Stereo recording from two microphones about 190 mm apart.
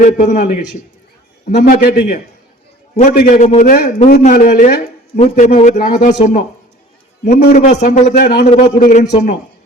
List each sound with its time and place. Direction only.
0.0 s a man's voice: 40° left (ahead or behind)
1.6 s a man's voice: 50° left (ahead or behind)
8.1 s a man's voice: 55° left (ahead or behind)
8.6 s a man's voice: 40° left (ahead or behind)